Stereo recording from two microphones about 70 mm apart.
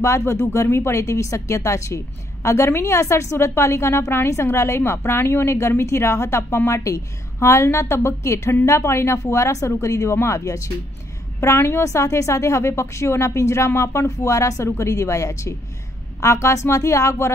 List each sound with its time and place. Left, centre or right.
0.0 s a woman's voice: left
11.4 s a woman's voice: left